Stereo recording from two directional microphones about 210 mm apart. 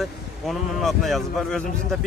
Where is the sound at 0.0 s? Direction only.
Centre (ahead or behind).